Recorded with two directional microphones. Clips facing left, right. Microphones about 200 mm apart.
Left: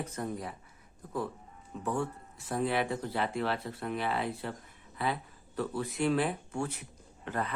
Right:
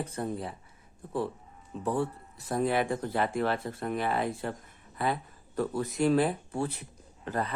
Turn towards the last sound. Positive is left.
turn(degrees=-35)  # may be behind; listen again after turning